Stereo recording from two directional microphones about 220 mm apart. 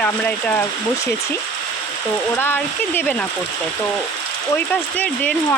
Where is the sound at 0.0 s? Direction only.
5° left (ahead or behind).